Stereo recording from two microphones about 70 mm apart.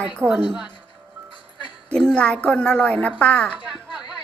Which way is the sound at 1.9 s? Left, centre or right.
Centre.